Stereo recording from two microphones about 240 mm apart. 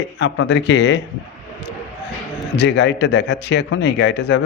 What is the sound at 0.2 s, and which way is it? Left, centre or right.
Speech, left.